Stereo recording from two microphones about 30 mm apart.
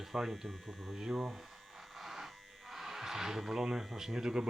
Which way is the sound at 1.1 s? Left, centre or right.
Centre.